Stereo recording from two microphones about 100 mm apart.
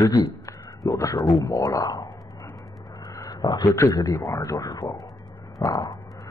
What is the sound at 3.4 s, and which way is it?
Speech, 40° left (ahead or behind).